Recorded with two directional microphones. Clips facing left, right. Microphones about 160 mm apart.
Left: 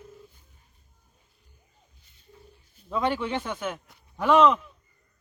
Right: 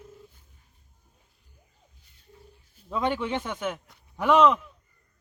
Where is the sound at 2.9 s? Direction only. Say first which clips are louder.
Even; 15° right (ahead or behind).